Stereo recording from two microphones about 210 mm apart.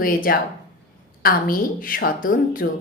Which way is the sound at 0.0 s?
45° left (ahead or behind).